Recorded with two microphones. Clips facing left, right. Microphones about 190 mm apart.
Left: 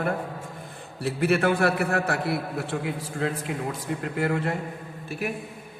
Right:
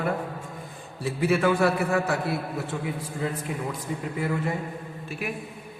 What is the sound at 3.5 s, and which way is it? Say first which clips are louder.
A man's voice: left 1 dB; 75° left (ahead or behind).